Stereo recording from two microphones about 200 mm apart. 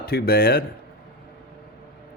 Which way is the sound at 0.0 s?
50° left (ahead or behind).